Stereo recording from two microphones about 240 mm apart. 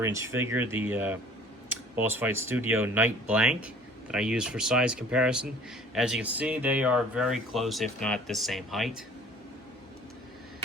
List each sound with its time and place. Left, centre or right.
0.0 s speech: centre